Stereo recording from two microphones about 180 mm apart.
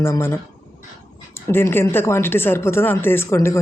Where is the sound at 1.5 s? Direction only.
15° left (ahead or behind).